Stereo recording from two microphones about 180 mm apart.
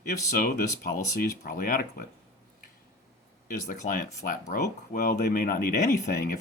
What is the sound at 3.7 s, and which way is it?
Speech, 45° left (ahead or behind).